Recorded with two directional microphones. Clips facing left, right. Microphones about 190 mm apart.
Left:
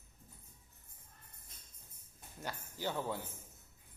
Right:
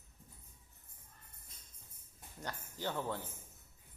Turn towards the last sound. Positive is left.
turn(degrees=10)  # may be behind; listen again after turning